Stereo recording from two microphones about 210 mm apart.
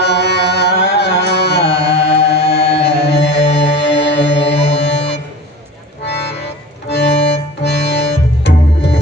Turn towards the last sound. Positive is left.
turn(degrees=55)  # may be behind; listen again after turning